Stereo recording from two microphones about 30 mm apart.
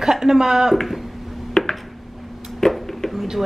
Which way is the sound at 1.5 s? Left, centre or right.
Centre.